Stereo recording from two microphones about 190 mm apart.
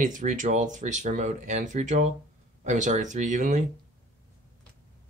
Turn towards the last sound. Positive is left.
turn(degrees=-40)  # may be behind; listen again after turning